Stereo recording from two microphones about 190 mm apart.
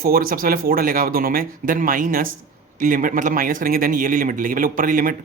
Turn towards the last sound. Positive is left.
turn(degrees=-50)  # may be behind; listen again after turning